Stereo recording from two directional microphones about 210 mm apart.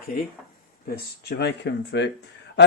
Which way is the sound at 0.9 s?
50° left (ahead or behind).